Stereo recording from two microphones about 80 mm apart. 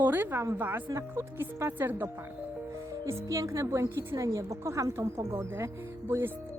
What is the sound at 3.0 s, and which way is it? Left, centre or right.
A woman's voice, right.